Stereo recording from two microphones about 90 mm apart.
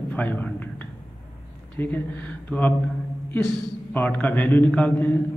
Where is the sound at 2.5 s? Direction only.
10° left (ahead or behind).